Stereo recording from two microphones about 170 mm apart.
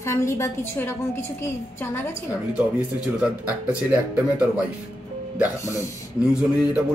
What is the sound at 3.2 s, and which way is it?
Speech, 5° right (ahead or behind).